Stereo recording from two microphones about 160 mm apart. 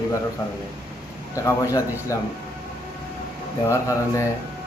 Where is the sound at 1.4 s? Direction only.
20° left (ahead or behind).